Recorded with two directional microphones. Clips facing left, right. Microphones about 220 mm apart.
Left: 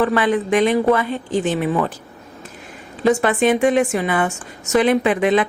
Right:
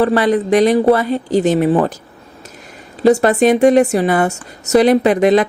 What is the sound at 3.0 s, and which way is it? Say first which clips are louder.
A woman's voice: right 5 dB; 40° right (ahead or behind).